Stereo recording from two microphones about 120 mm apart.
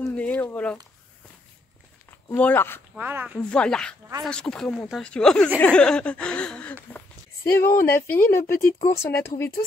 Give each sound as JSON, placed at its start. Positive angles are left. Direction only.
{"t": 0.1, "sound": "speech", "side_deg": 10}
{"t": 2.3, "sound": "speech", "side_deg": 15}
{"t": 3.0, "sound": "speech", "side_deg": -15}
{"t": 3.3, "sound": "speech", "side_deg": 10}
{"t": 8.7, "sound": "speech", "side_deg": 60}
{"t": 9.0, "sound": "speech", "side_deg": 20}